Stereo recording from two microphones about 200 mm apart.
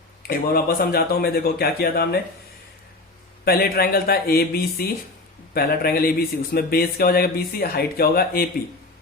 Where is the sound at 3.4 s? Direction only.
50° left (ahead or behind).